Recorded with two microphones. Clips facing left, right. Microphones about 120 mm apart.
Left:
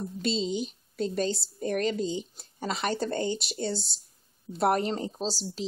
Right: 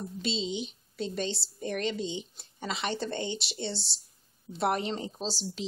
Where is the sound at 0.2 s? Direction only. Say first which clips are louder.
Left 4 dB; 45° left (ahead or behind).